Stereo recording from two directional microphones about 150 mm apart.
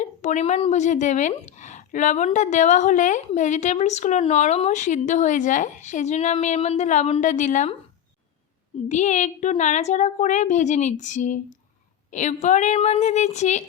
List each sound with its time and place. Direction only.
0.0 s a woman's voice: 55° left (ahead or behind)
8.9 s a woman's voice: 55° left (ahead or behind)